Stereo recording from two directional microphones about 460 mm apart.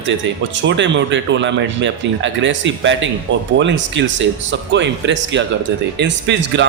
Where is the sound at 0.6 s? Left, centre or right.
Right.